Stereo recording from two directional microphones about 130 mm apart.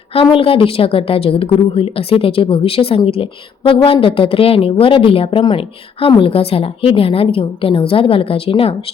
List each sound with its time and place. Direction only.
0.1 s a woman's voice: 45° left (ahead or behind)